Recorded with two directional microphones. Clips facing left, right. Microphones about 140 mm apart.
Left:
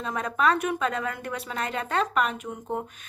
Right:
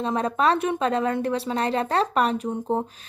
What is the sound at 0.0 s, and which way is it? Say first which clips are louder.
A woman's voice: right 3 dB; 30° right (ahead or behind).